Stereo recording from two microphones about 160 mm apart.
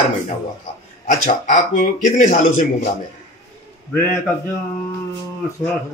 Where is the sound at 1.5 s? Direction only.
55° left (ahead or behind).